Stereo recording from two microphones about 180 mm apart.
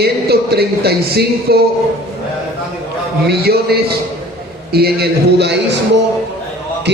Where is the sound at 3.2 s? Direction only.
60° right (ahead or behind).